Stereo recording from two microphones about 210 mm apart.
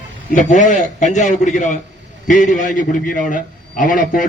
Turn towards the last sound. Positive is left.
turn(degrees=40)  # may be behind; listen again after turning